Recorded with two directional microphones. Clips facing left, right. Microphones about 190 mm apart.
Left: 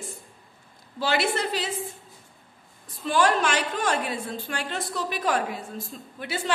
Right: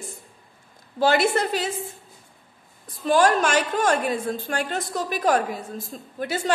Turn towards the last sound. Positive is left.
turn(degrees=-45)  # may be behind; listen again after turning